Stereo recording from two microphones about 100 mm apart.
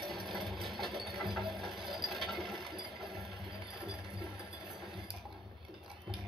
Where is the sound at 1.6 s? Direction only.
50° right (ahead or behind).